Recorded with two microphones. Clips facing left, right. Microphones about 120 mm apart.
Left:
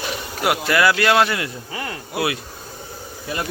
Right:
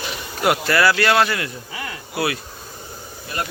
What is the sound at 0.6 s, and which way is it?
Speech, 15° left (ahead or behind).